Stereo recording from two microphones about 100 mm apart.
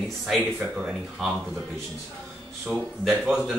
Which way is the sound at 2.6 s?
Centre (ahead or behind).